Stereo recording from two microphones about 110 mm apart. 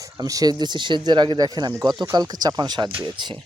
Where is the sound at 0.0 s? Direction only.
30° right (ahead or behind).